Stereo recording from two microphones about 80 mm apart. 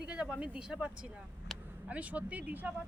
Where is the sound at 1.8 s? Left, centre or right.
Centre.